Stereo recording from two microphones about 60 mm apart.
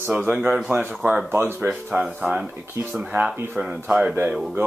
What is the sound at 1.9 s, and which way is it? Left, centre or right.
Speech, centre.